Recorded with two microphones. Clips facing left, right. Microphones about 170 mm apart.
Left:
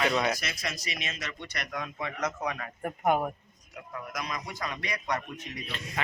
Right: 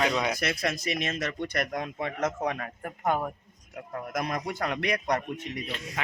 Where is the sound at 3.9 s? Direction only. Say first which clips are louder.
Right 5 dB; 50° right (ahead or behind).